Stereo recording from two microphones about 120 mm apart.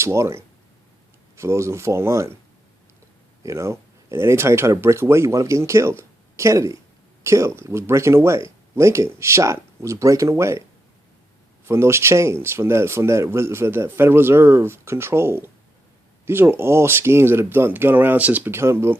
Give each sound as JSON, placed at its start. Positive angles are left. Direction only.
{"t": 0.0, "sound": "speech", "side_deg": -25}
{"t": 3.4, "sound": "speech", "side_deg": -25}
{"t": 11.7, "sound": "speech", "side_deg": -20}